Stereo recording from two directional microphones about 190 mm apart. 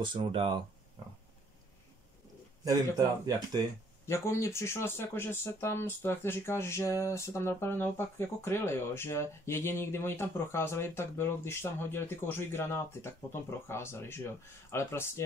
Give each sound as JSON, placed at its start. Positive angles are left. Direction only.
{"t": 0.0, "sound": "speech", "side_deg": -25}
{"t": 2.6, "sound": "speech", "side_deg": -20}
{"t": 4.1, "sound": "speech", "side_deg": 15}